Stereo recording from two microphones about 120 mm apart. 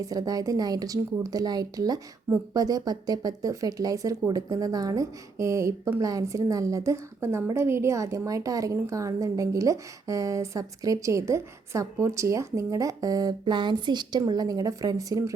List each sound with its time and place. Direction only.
0.0 s a woman's voice: 30° right (ahead or behind)